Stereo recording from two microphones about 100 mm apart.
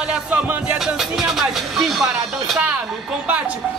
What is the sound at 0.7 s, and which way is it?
Speech, 5° right (ahead or behind).